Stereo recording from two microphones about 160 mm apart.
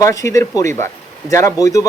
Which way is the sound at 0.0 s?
20° left (ahead or behind).